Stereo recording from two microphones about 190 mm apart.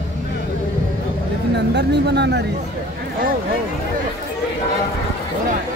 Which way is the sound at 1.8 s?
65° right (ahead or behind).